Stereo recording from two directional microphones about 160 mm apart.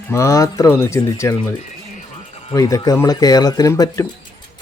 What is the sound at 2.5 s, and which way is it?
Speech, 20° left (ahead or behind).